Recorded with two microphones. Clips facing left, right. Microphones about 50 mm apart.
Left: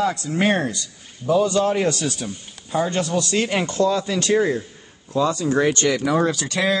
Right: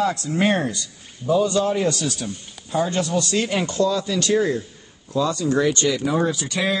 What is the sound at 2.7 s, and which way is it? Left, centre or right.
Speech, centre.